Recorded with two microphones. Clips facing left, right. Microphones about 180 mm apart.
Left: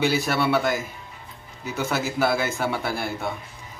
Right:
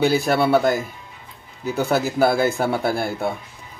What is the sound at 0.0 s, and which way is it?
Speech, 35° right (ahead or behind).